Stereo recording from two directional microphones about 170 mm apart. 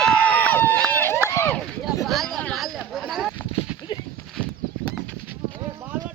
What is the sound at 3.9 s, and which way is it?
Clip-clop, 25° left (ahead or behind).